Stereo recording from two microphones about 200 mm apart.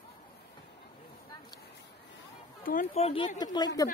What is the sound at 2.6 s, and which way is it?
Speech, 45° left (ahead or behind).